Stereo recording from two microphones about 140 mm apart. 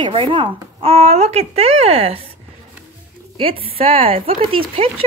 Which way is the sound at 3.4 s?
40° right (ahead or behind).